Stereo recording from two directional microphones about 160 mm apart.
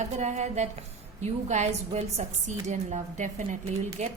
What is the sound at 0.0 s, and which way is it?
Speech, 45° right (ahead or behind).